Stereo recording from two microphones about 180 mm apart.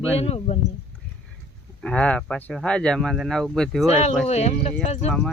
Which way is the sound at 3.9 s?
35° left (ahead or behind).